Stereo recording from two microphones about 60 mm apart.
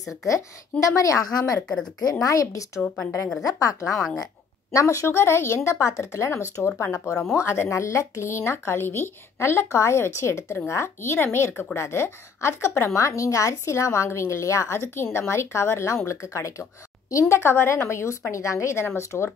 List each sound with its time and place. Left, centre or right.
0.3 s a woman's voice: left
2.4 s a woman's voice: left
3.8 s a woman's voice: centre
4.7 s a woman's voice: left